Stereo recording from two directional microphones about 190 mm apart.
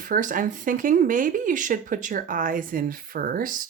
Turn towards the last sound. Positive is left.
turn(degrees=-45)  # may be behind; listen again after turning